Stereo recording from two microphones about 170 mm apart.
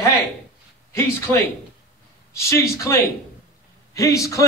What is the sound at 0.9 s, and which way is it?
Speech, 15° left (ahead or behind).